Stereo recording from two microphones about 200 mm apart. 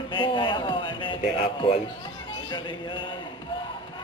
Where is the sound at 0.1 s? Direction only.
25° left (ahead or behind).